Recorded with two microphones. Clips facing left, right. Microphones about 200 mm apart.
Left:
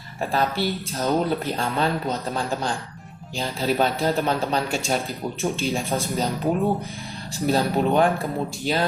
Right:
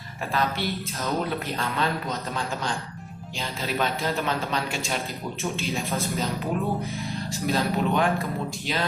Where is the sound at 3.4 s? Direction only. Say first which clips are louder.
Left 6 dB; 40° left (ahead or behind).